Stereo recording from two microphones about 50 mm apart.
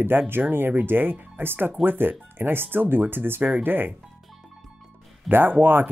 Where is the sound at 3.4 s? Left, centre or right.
Right.